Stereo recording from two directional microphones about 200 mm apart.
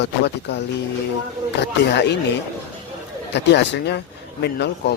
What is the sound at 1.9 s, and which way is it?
Speech, 60° left (ahead or behind).